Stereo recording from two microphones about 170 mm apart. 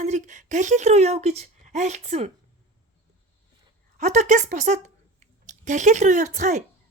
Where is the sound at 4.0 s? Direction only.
45° right (ahead or behind).